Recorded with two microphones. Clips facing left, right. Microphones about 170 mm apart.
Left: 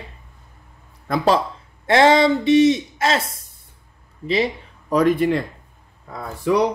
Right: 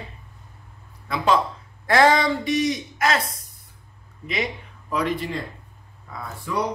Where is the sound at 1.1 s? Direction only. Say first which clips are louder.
Left 3 dB; 35° left (ahead or behind).